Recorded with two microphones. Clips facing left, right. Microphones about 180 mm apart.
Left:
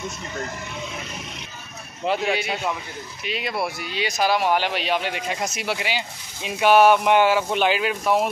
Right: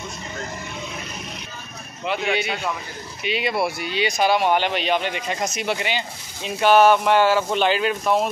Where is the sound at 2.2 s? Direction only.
Centre (ahead or behind).